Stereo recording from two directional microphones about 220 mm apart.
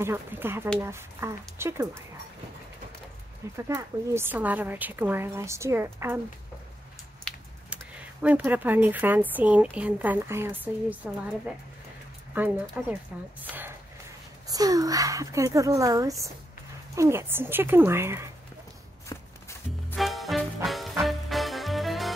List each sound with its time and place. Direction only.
0.0 s speech: 10° right (ahead or behind)
3.5 s speech: 15° right (ahead or behind)
7.2 s speech: centre (ahead or behind)
12.8 s speech: 5° right (ahead or behind)
13.4 s a sound: 10° right (ahead or behind)
14.5 s speech: 15° right (ahead or behind)
19.1 s walk: 20° left (ahead or behind)
19.9 s music: centre (ahead or behind)